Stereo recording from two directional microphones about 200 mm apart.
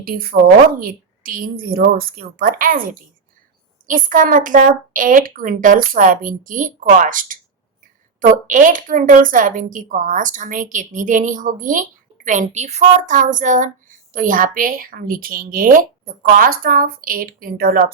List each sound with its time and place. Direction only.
0.0 s a woman's voice: 45° right (ahead or behind)